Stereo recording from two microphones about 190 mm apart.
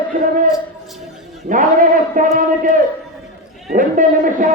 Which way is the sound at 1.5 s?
45° right (ahead or behind).